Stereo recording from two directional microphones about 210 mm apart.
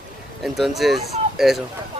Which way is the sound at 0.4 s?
Centre (ahead or behind).